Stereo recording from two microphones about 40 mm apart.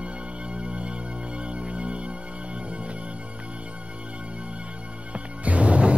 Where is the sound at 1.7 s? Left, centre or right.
Right.